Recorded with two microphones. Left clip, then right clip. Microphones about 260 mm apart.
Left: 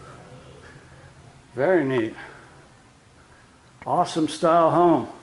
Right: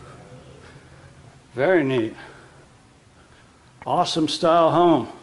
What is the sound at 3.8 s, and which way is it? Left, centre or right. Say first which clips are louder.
A man's voice: right 1 dB; centre.